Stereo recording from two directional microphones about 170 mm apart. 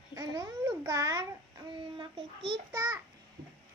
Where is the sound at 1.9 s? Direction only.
30° right (ahead or behind).